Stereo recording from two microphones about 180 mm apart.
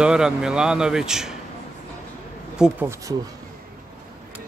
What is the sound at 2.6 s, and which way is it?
Speech, 10° right (ahead or behind).